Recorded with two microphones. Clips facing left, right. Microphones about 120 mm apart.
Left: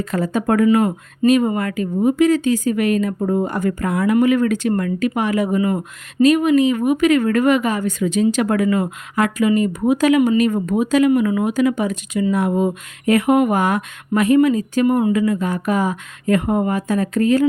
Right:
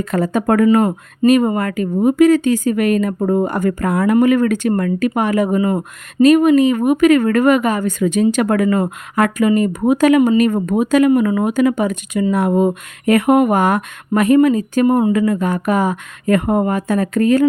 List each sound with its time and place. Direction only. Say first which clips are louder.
0.0 s speech: right 3 dB; 55° right (ahead or behind)
0.7 s speech: right 2 dB; 40° right (ahead or behind)
14.8 s speech: right 3 dB; 30° right (ahead or behind)
15.1 s speech: right 2 dB; 50° right (ahead or behind)